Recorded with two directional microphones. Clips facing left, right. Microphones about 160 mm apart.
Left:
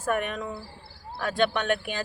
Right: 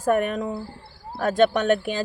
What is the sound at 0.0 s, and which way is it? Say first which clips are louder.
A man's voice: right 6 dB; 40° right (ahead or behind).